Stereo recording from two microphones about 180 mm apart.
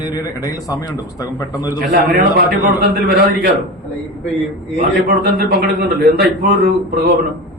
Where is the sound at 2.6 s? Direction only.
55° right (ahead or behind).